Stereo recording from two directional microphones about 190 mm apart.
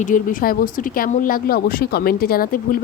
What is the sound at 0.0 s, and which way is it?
Speech, 45° left (ahead or behind).